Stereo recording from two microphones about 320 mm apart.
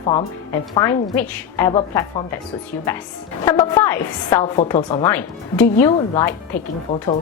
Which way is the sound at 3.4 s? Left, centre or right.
Centre.